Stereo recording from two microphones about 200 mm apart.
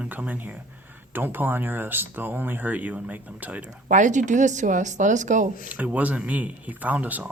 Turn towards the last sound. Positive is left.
turn(degrees=-10)  # may be behind; listen again after turning